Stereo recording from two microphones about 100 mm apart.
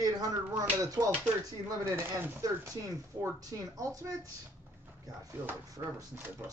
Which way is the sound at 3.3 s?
35° right (ahead or behind).